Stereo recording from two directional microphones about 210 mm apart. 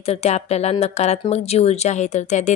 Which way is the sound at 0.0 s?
30° left (ahead or behind).